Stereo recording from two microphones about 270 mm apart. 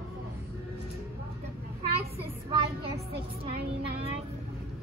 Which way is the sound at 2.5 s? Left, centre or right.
Centre.